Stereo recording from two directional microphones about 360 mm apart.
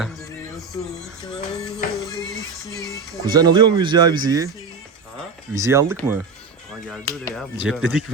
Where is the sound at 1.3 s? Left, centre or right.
Centre.